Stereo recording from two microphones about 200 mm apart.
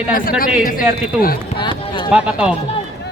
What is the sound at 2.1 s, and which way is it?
Speech, 5° right (ahead or behind).